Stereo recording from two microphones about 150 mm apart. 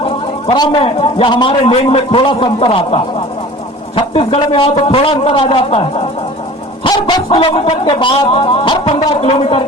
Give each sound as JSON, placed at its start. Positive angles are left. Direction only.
{"t": 0.0, "sound": "a man's voice", "side_deg": 35}
{"t": 1.6, "sound": "a man's voice", "side_deg": 45}
{"t": 6.8, "sound": "dog", "side_deg": 30}
{"t": 8.3, "sound": "a man's voice", "side_deg": 40}